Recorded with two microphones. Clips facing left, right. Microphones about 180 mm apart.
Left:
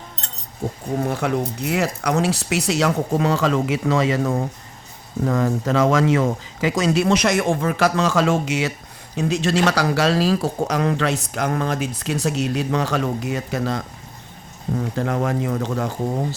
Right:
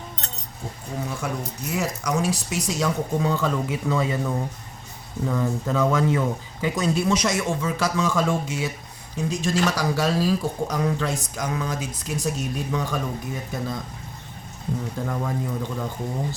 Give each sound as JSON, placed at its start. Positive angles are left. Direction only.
{"t": 0.9, "sound": "speech", "side_deg": 60}
{"t": 9.1, "sound": "speech", "side_deg": 70}
{"t": 14.9, "sound": "speech", "side_deg": 75}